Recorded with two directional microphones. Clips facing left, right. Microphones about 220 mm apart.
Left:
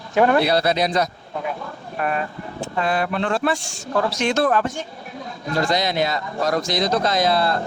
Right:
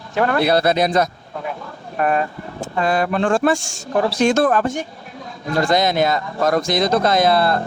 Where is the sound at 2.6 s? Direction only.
45° right (ahead or behind).